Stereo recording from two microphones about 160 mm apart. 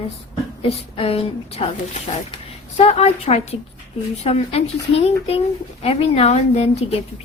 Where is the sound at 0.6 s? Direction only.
35° left (ahead or behind).